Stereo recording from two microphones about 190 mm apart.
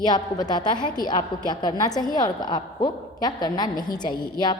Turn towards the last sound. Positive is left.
turn(degrees=25)  # may be behind; listen again after turning